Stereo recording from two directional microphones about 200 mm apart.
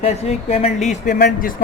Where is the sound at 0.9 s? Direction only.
45° left (ahead or behind).